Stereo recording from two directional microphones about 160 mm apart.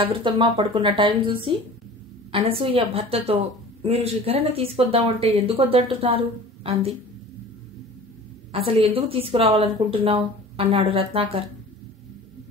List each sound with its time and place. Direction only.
0.0 s speech: 30° right (ahead or behind)
8.5 s speech: 35° right (ahead or behind)